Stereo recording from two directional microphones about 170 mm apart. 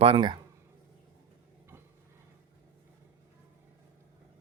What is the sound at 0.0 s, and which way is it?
Speech, 30° right (ahead or behind).